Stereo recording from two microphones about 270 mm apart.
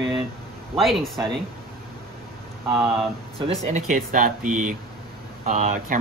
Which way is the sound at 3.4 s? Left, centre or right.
Right.